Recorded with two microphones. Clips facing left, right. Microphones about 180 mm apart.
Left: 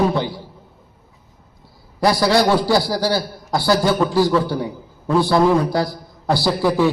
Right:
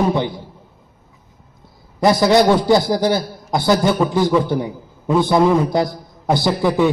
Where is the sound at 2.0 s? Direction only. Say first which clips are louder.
Right 3 dB; 20° right (ahead or behind).